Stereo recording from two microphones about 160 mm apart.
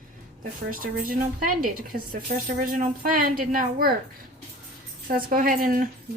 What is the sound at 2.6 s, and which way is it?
Speech, 60° right (ahead or behind).